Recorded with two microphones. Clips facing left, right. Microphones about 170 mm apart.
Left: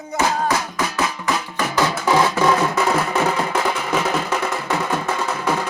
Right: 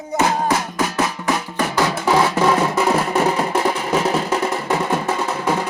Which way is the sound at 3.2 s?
35° right (ahead or behind).